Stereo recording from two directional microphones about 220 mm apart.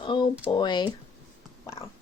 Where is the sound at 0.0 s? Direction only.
20° left (ahead or behind).